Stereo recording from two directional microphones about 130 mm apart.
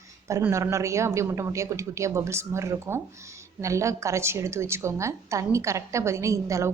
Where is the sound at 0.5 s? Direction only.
25° right (ahead or behind).